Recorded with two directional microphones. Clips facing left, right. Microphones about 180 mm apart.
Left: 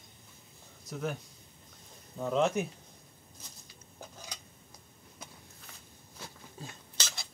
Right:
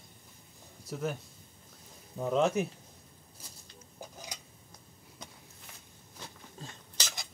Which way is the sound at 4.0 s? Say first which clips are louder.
Right 2 dB; 15° right (ahead or behind).